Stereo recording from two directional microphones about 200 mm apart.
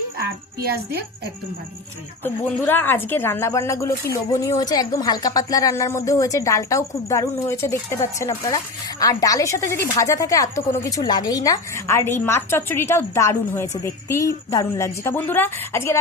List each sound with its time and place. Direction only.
0.2 s a child's voice: 50° right (ahead or behind)
2.2 s speech: 10° left (ahead or behind)